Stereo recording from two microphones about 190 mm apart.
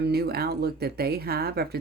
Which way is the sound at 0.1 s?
55° right (ahead or behind).